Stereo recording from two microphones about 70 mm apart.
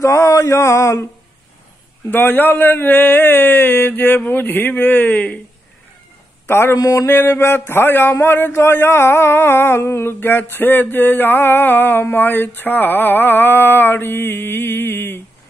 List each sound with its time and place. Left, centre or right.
0.0 s mantra: left
2.0 s speech: left
6.4 s speech: left
6.8 s mantra: left
7.2 s a man's voice: left